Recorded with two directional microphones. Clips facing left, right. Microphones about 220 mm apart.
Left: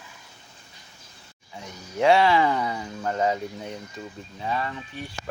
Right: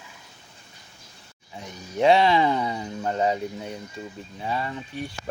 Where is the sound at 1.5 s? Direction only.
20° right (ahead or behind).